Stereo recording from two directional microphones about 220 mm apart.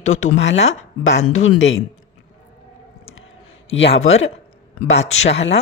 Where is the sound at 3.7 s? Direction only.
55° left (ahead or behind).